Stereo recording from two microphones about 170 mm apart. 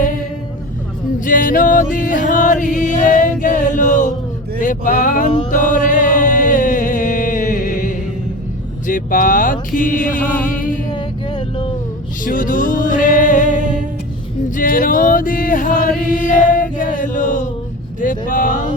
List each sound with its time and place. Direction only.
1.2 s chant: 55° left (ahead or behind)
4.6 s a sound: 50° left (ahead or behind)
5.5 s chant: 50° left (ahead or behind)
8.9 s music: 55° left (ahead or behind)
10.9 s music: 30° left (ahead or behind)
12.2 s music: 55° left (ahead or behind)
14.5 s chant: 55° left (ahead or behind)
18.0 s vehicle: 50° left (ahead or behind)